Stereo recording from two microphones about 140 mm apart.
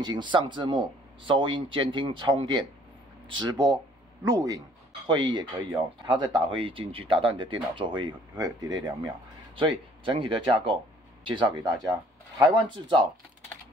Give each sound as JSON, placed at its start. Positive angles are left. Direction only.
{"t": 0.0, "sound": "speech", "side_deg": -30}
{"t": 5.0, "sound": "speech", "side_deg": -35}